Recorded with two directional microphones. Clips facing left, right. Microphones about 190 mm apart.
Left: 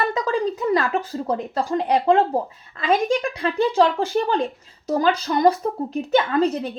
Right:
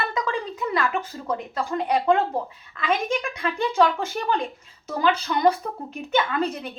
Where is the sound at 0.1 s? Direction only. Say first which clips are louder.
Left 5 dB; 35° left (ahead or behind).